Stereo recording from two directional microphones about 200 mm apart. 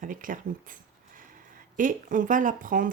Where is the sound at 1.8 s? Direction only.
40° right (ahead or behind).